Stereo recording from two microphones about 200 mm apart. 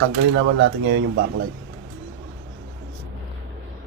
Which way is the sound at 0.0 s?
65° right (ahead or behind).